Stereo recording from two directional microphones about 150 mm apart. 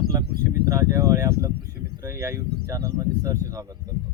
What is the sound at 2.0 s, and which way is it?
Speech, 20° right (ahead or behind).